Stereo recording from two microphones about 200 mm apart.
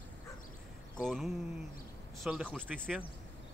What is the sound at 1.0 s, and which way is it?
Speech, centre (ahead or behind).